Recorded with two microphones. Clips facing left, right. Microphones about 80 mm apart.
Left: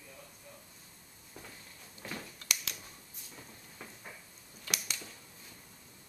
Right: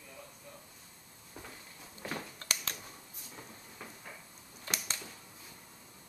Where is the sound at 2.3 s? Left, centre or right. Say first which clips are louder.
Right 1 dB; right.